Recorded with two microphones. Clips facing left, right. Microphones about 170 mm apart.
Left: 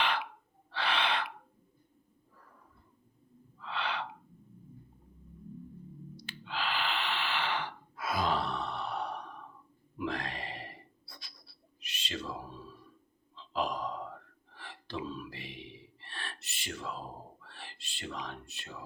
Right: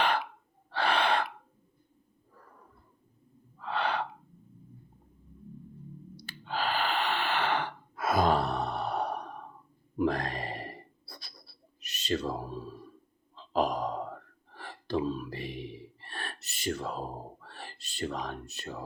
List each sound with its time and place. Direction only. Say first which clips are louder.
0.7 s gasp: right 5 dB; 45° right (ahead or behind)
3.6 s gasp: right 6 dB; 45° right (ahead or behind)
6.1 s gasp: right 5 dB; 40° right (ahead or behind)
10.0 s a sound: right 7 dB; 45° right (ahead or behind)
13.3 s gasp: right 5 dB; 45° right (ahead or behind)